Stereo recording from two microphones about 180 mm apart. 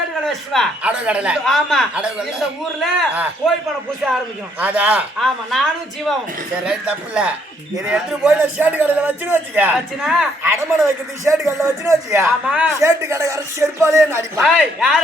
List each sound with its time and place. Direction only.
0.3 s a man's voice: centre (ahead or behind)
6.7 s a man's voice: 5° right (ahead or behind)
10.4 s a man's voice: 15° right (ahead or behind)
14.4 s speech: 5° right (ahead or behind)